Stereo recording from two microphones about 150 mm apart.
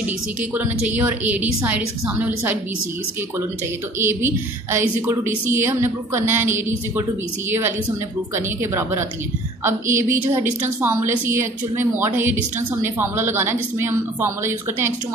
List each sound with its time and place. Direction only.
0.6 s a woman's voice: 10° right (ahead or behind)
4.0 s a woman's voice: 15° right (ahead or behind)
10.0 s a woman's voice: 15° right (ahead or behind)